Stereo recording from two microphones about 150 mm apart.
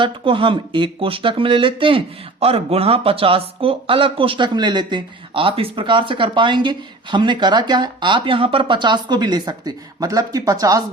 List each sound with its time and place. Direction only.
0.0 s speech: 35° right (ahead or behind)